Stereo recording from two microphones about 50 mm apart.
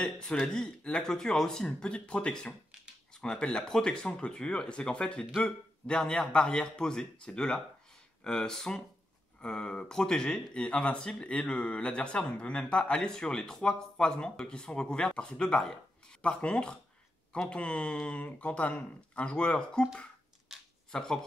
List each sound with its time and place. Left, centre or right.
0.0 s speech: centre
1.8 s speech: left
20.5 s camera: centre
20.9 s speech: centre